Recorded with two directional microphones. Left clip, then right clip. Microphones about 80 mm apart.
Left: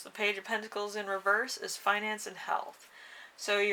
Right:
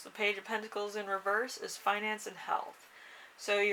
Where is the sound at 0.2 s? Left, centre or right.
Left.